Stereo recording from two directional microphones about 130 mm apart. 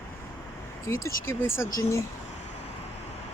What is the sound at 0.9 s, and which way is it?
Speech, 20° left (ahead or behind).